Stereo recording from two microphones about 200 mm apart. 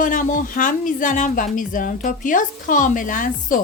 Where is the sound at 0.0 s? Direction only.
40° left (ahead or behind).